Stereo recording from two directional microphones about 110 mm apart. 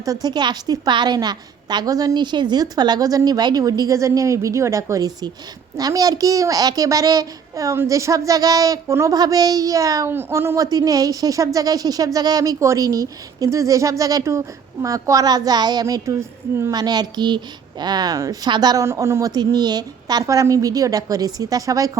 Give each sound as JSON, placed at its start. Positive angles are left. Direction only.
{"t": 0.0, "sound": "speech", "side_deg": -35}
{"t": 10.1, "sound": "speech", "side_deg": -20}
{"t": 16.7, "sound": "speech", "side_deg": -40}
{"t": 18.9, "sound": "speech", "side_deg": -25}